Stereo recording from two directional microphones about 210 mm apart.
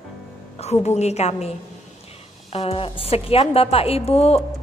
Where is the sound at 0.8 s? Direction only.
30° left (ahead or behind).